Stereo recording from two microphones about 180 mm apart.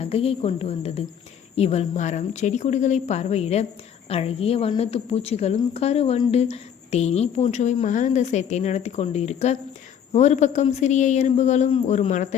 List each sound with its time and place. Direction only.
0.0 s a woman's voice: 35° left (ahead or behind)